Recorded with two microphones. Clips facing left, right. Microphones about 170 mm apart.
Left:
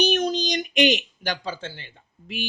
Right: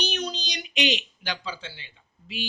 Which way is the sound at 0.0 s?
50° left (ahead or behind).